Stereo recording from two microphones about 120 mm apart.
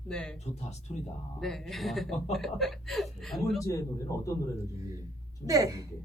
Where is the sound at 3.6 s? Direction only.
25° left (ahead or behind).